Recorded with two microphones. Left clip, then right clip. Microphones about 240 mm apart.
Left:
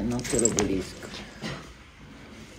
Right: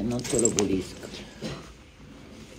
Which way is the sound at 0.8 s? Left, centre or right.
Centre.